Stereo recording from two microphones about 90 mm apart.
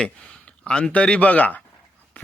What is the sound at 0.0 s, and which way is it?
A man's voice, 10° left (ahead or behind).